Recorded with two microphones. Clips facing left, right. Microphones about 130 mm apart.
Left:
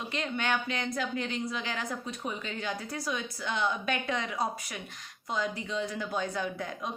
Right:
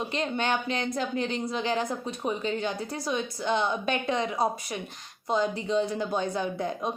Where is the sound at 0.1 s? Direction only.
25° right (ahead or behind).